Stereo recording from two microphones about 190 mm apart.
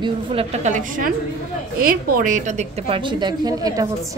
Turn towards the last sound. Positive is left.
turn(degrees=-20)  # may be behind; listen again after turning